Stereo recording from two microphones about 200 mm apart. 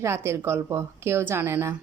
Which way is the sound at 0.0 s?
15° right (ahead or behind).